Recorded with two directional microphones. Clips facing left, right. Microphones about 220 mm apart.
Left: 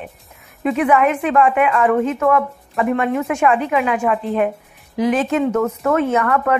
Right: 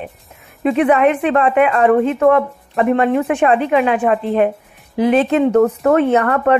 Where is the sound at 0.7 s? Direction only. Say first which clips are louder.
Right 3 dB; 30° right (ahead or behind).